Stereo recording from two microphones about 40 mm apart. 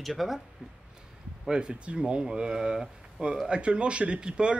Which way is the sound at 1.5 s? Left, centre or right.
Right.